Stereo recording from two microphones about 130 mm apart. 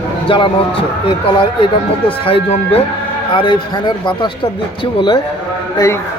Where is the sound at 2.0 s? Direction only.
45° left (ahead or behind); by 6.0 s 25° left (ahead or behind).